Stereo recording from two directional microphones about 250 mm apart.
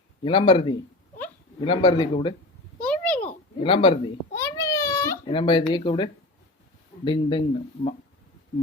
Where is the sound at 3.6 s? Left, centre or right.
Left.